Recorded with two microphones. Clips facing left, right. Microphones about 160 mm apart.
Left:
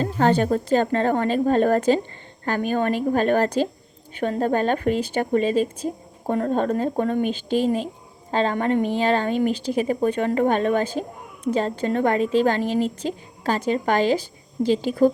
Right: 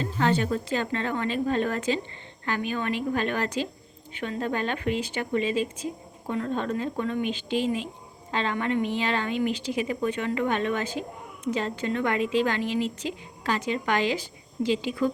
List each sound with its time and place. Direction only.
0.0 s a woman's voice: 45° left (ahead or behind)